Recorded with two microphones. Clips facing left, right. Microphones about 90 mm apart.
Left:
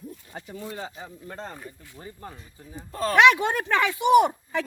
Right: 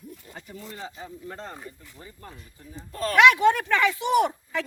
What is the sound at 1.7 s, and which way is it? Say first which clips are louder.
Speech: left 3 dB; 30° left (ahead or behind).